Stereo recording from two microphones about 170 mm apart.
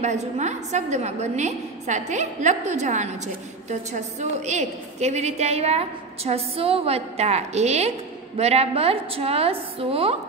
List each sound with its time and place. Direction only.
0.0 s a woman's voice: 45° right (ahead or behind)